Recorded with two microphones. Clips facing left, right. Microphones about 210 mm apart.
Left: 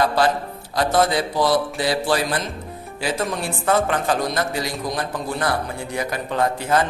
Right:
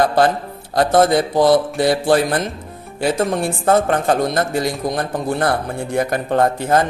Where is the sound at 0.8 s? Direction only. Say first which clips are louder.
Right 5 dB; 50° right (ahead or behind).